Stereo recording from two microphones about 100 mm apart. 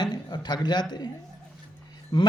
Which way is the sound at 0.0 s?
45° left (ahead or behind).